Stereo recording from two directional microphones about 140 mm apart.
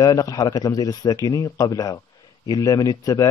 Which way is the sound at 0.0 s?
25° left (ahead or behind).